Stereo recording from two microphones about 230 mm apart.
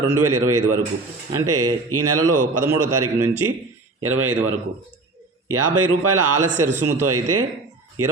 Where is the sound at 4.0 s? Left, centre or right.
Right.